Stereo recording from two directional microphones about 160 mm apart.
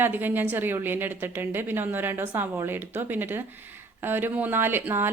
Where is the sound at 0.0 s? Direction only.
10° right (ahead or behind).